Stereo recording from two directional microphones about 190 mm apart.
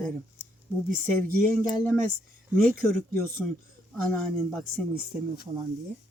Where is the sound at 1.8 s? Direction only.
10° left (ahead or behind).